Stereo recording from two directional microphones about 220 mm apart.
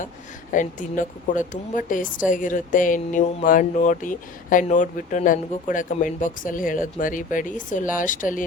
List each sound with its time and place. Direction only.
0.5 s a woman's voice: 35° left (ahead or behind)